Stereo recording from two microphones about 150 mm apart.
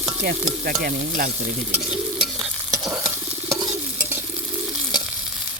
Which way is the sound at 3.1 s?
20° right (ahead or behind).